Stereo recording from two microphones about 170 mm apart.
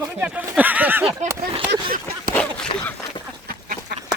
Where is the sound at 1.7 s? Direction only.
60° right (ahead or behind).